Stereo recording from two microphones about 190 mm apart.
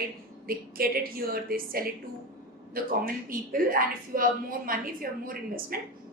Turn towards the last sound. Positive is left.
turn(degrees=-50)  # may be behind; listen again after turning